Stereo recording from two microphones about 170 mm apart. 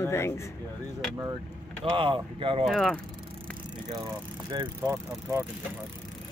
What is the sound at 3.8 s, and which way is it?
Speech, 25° right (ahead or behind).